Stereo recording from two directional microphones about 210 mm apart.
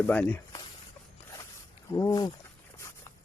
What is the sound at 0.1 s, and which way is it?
Speech, 5° left (ahead or behind).